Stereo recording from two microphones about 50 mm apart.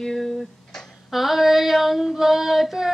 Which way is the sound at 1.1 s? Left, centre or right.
Centre.